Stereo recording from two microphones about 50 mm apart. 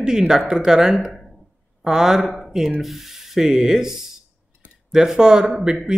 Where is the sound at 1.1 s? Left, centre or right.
Centre.